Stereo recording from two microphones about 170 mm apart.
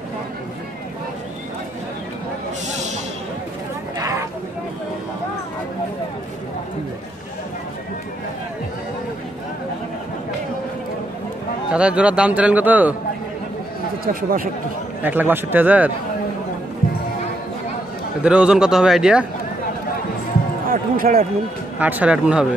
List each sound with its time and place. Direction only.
11.7 s speech: 5° right (ahead or behind)
14.0 s speech: 55° right (ahead or behind)
15.0 s speech: 10° right (ahead or behind)
18.2 s a man's voice: 5° right (ahead or behind)
20.6 s speech: 55° right (ahead or behind)
21.7 s speech: 10° right (ahead or behind)